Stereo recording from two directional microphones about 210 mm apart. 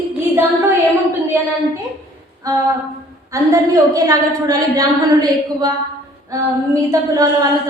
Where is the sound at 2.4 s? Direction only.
15° right (ahead or behind).